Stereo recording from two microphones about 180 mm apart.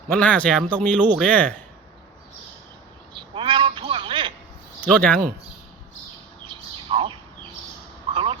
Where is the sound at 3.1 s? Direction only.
25° right (ahead or behind).